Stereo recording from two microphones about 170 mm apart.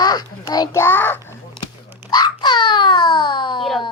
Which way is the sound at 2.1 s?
25° left (ahead or behind).